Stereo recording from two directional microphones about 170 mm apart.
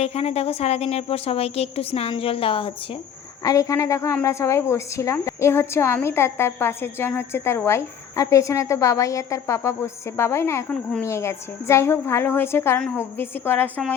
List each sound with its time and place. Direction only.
0.0 s a woman's voice: 35° left (ahead or behind)
3.4 s a woman's voice: 20° left (ahead or behind)